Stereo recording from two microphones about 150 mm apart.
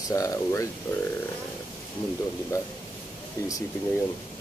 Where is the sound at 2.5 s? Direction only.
20° left (ahead or behind).